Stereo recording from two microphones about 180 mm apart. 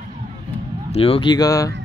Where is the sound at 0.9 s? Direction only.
30° left (ahead or behind).